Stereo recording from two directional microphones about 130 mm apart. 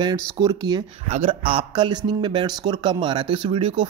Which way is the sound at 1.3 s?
45° right (ahead or behind).